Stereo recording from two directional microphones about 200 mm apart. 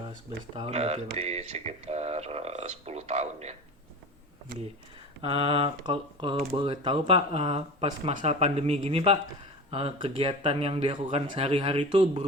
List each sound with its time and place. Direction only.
0.5 s speech: 30° right (ahead or behind)
5.2 s speech: 25° right (ahead or behind)